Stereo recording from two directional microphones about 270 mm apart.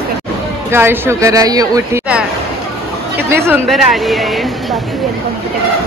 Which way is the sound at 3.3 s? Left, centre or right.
Centre.